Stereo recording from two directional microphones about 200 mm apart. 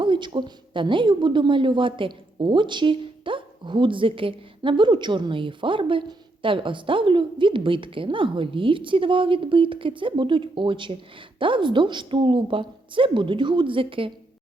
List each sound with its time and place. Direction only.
0.0 s a woman's voice: 25° right (ahead or behind)